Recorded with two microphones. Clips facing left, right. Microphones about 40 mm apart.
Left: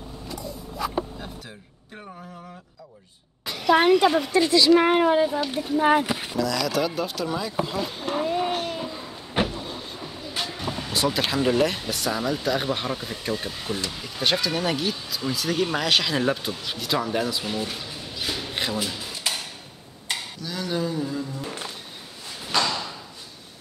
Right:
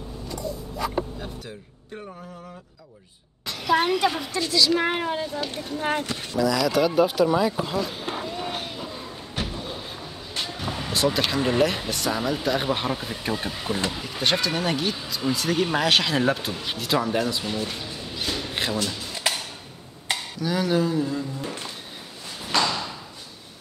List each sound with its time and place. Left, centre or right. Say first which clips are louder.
0.3 s a sound: right 3 dB; centre
3.4 s a sound: left 5 dB; centre
4.0 s speech: left 4 dB; centre
4.3 s speech: left 5 dB; centre
6.3 s speech: right 4 dB; centre
9.4 s vehicle: left 7 dB; left
10.3 s music: even; centre
11.9 s speech: even; centre
20.1 s a sound: right 5 dB; centre
22.5 s thump: right 1 dB; centre